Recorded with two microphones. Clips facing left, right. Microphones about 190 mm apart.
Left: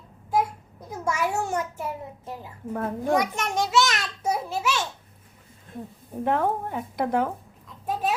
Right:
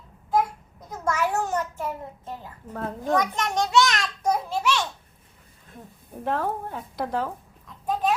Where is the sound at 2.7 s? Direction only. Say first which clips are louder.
Left 1 dB; 10° left (ahead or behind).